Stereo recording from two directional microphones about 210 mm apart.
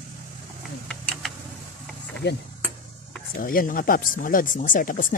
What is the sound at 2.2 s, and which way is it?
Speech, 55° left (ahead or behind).